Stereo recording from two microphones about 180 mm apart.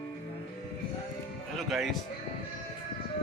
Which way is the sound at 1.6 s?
Centre (ahead or behind).